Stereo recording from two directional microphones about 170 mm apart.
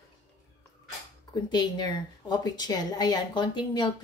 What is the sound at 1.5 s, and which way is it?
A woman's voice, 25° left (ahead or behind).